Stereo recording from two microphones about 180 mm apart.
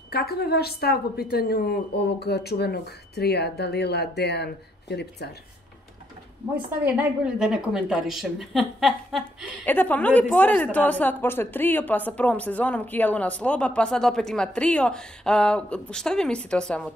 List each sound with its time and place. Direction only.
0.1 s a woman's voice: 60° left (ahead or behind)
6.5 s a woman's voice: 10° right (ahead or behind)